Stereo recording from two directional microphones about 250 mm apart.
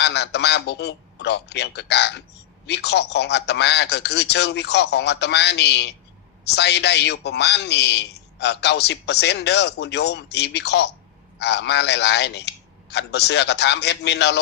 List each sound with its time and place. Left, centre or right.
0.0 s a man's voice: left